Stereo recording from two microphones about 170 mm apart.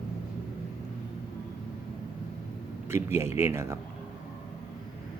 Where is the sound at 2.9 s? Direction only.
15° right (ahead or behind).